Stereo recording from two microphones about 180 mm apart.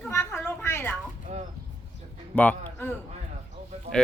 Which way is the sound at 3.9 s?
35° right (ahead or behind).